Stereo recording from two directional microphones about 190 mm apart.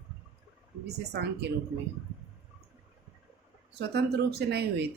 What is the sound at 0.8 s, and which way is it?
Speech, 60° right (ahead or behind).